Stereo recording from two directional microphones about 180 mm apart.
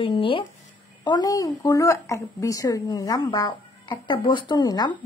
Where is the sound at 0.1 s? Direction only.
25° left (ahead or behind).